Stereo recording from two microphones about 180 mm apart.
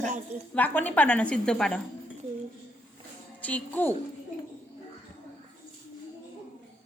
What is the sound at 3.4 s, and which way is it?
Speech, 10° left (ahead or behind).